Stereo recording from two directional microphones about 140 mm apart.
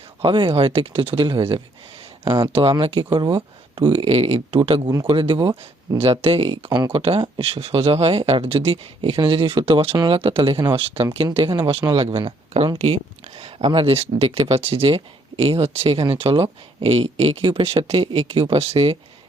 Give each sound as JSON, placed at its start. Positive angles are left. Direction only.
{"t": 0.2, "sound": "speech", "side_deg": -40}
{"t": 6.0, "sound": "speech", "side_deg": -45}